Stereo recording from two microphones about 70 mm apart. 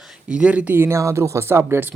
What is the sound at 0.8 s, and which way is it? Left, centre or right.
Speech, right.